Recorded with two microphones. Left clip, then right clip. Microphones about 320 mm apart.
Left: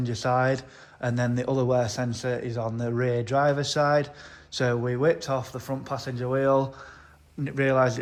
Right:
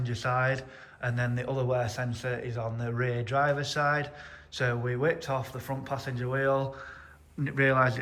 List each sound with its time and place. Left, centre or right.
0.0 s a man's voice: centre